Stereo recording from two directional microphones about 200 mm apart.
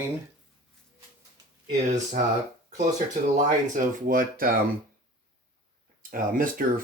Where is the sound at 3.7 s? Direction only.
40° right (ahead or behind).